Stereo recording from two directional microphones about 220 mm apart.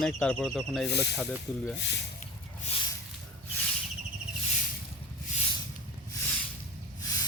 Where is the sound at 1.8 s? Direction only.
50° left (ahead or behind).